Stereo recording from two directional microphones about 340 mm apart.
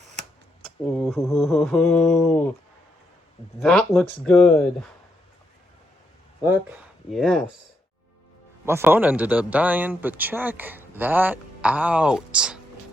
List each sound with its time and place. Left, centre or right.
0.9 s speech: centre
3.6 s speech: centre
6.4 s speech: centre
8.6 s speech: centre